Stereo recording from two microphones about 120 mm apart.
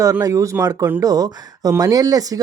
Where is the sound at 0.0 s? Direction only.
25° right (ahead or behind).